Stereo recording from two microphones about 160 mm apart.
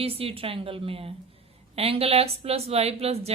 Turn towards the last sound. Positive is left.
turn(degrees=-40)  # may be behind; listen again after turning